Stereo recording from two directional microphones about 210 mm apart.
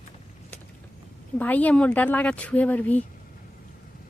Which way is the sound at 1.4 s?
5° left (ahead or behind).